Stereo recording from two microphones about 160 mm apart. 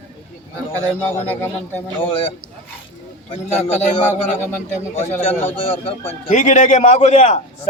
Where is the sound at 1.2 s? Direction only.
15° left (ahead or behind).